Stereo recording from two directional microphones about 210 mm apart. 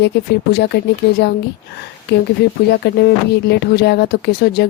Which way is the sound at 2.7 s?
50° left (ahead or behind).